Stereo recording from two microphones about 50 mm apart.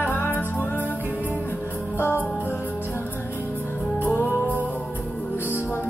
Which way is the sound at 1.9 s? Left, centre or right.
Left.